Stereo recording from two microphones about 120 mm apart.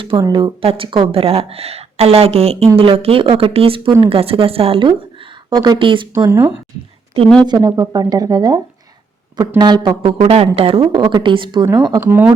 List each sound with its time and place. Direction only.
0.2 s speech: 35° right (ahead or behind)
0.6 s a woman's voice: 50° right (ahead or behind)
7.4 s a woman's voice: 35° right (ahead or behind)
11.9 s speech: 20° right (ahead or behind)